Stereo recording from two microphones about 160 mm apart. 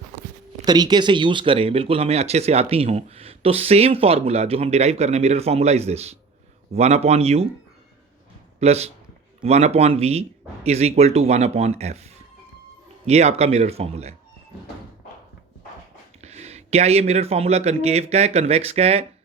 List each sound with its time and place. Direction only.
0.6 s speech: 25° right (ahead or behind); by 7.4 s 40° right (ahead or behind)
8.6 s speech: 40° right (ahead or behind)
16.2 s speech: 45° right (ahead or behind)